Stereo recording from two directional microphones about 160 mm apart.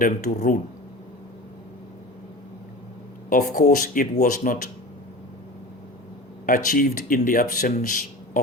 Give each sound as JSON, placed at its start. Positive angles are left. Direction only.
{"t": 0.0, "sound": "speech", "side_deg": 55}
{"t": 3.2, "sound": "speech", "side_deg": 60}
{"t": 6.4, "sound": "speech", "side_deg": 60}